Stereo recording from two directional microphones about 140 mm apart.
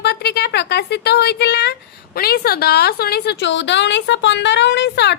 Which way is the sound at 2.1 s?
90° left.